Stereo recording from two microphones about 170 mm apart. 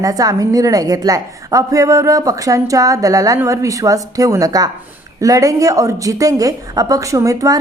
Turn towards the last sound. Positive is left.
turn(degrees=-20)  # may be behind; listen again after turning